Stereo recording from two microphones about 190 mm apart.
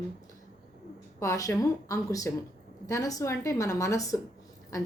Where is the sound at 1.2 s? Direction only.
15° left (ahead or behind).